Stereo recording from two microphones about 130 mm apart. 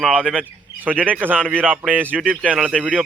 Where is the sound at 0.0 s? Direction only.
5° right (ahead or behind).